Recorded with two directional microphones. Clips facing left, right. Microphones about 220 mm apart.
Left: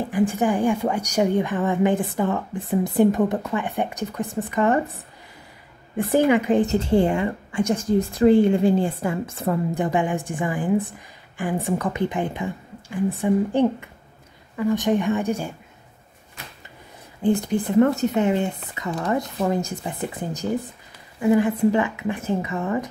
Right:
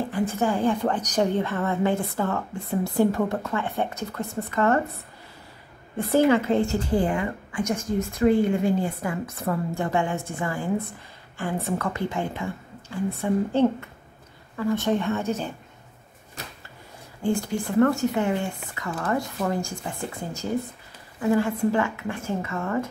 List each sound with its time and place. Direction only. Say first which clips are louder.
0.1 s a woman's voice: left 7 dB; 15° left (ahead or behind)
6.1 s a woman's voice: left 2 dB; 15° left (ahead or behind)
17.2 s a woman's voice: left 4 dB; 20° left (ahead or behind)